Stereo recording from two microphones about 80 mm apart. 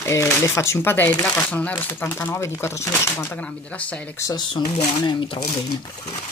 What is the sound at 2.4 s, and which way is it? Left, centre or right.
Speech, left.